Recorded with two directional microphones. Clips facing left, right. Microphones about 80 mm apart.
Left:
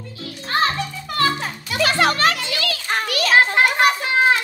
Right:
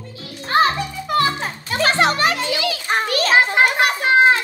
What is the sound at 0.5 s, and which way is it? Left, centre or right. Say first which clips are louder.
Music: right 4 dB; right.